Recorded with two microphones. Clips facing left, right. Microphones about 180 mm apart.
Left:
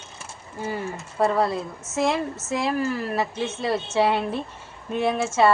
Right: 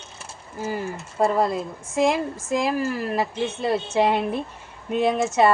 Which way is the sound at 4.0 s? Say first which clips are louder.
Even; 15° right (ahead or behind).